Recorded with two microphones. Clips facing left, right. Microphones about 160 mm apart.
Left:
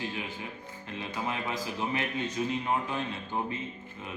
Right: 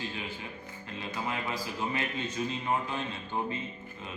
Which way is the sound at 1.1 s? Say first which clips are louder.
Left 1 dB; 20° left (ahead or behind).